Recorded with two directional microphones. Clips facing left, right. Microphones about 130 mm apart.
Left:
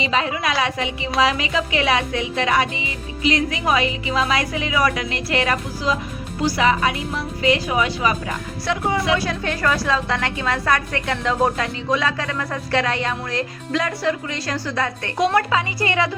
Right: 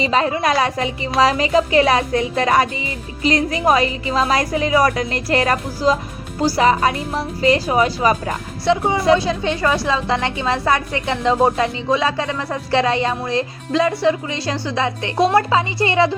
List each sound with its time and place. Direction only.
0.0 s speech: 40° right (ahead or behind)
8.6 s a woman's voice: 25° right (ahead or behind)